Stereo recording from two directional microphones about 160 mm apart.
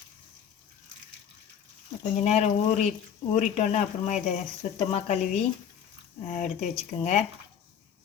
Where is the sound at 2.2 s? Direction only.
45° left (ahead or behind).